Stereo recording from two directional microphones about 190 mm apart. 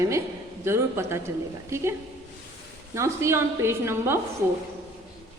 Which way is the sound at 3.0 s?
15° right (ahead or behind).